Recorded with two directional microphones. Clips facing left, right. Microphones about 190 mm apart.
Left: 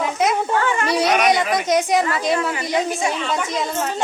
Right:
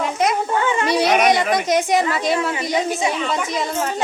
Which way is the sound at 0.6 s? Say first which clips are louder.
Right 1 dB; 20° right (ahead or behind).